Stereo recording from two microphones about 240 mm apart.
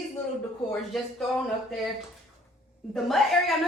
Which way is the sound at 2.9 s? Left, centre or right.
Centre.